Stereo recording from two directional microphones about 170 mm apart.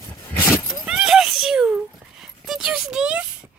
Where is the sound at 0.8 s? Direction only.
5° right (ahead or behind).